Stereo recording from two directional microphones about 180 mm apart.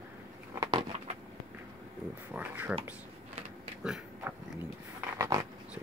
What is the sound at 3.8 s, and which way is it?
Oink, 5° right (ahead or behind).